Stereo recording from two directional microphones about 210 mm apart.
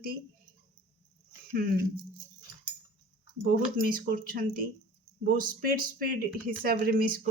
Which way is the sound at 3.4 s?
40° right (ahead or behind).